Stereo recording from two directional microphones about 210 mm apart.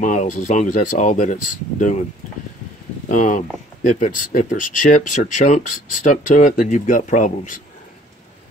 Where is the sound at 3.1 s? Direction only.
40° left (ahead or behind).